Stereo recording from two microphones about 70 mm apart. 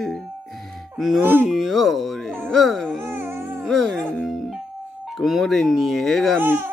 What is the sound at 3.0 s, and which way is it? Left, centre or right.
Dog, right.